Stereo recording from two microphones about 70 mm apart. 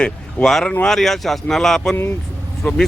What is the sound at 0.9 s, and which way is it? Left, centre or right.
Speech, centre.